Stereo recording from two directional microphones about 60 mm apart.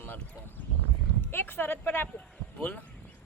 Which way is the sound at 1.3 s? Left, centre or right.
Left.